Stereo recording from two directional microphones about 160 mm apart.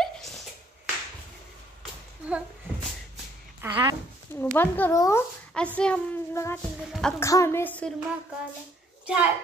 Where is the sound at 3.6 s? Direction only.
25° right (ahead or behind).